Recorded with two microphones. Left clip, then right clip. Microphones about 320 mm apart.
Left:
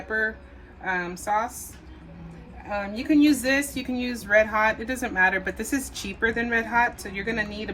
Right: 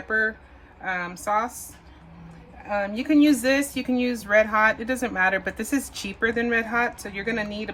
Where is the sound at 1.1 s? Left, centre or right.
Right.